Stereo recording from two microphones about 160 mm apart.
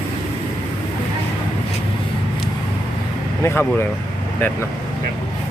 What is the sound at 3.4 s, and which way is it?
Speech, 15° left (ahead or behind).